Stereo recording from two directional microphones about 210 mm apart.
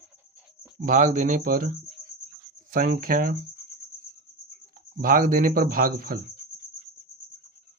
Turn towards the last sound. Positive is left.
turn(degrees=-45)  # may be behind; listen again after turning